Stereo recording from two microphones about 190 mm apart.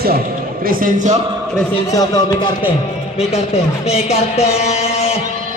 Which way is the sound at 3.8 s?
35° left (ahead or behind).